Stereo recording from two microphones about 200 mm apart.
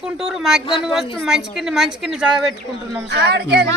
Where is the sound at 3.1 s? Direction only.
55° right (ahead or behind).